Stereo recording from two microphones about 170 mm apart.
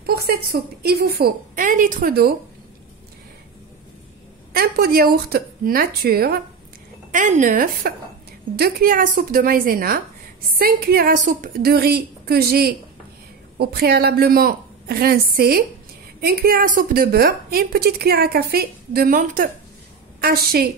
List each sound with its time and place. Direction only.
0.3 s a woman's voice: 65° right (ahead or behind)
4.6 s a woman's voice: 65° right (ahead or behind)
7.1 s a woman's voice: 50° right (ahead or behind)